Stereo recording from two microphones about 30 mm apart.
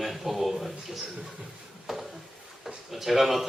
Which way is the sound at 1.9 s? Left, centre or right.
Centre.